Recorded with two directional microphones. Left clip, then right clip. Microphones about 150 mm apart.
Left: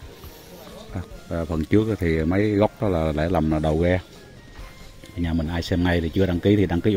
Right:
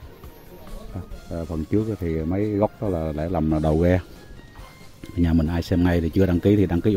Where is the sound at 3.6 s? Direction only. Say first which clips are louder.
Right 1 dB; 25° right (ahead or behind).